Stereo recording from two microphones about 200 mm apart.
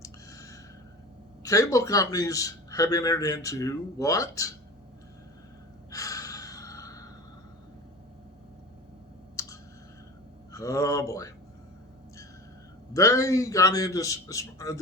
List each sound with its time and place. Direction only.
0.0 s a sound: 15° left (ahead or behind)
1.5 s a man's voice: 15° left (ahead or behind)
5.9 s gasp: 15° left (ahead or behind)
9.3 s clicking: 15° left (ahead or behind)
10.5 s a man's voice: 15° left (ahead or behind)
12.9 s a man's voice: 15° left (ahead or behind)